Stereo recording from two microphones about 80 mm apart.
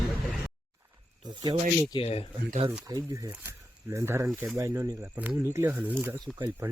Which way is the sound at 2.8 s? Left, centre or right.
Right.